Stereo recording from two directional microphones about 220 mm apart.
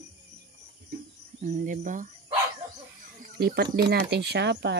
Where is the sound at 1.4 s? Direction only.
35° right (ahead or behind).